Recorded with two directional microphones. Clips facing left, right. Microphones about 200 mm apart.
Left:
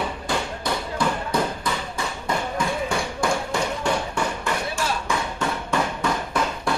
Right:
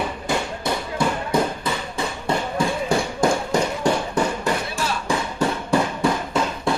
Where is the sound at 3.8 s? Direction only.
35° right (ahead or behind).